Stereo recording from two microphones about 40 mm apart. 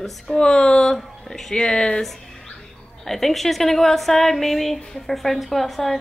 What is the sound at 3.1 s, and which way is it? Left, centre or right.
A woman's voice, centre.